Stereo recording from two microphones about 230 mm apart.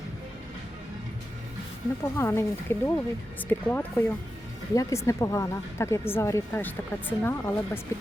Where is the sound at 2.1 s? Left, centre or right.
Centre.